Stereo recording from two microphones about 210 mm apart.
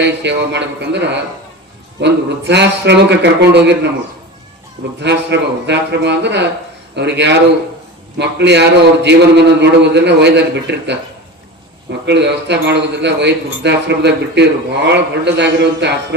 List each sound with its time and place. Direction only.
0.0 s a man's voice: 55° right (ahead or behind)
4.9 s a man's voice: 55° right (ahead or behind)
12.0 s a man's voice: 55° right (ahead or behind)